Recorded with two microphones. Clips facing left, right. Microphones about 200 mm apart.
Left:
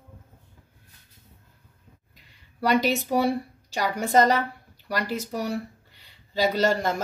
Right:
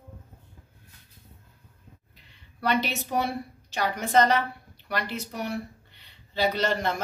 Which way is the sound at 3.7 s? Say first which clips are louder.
Left 2 dB; 40° left (ahead or behind).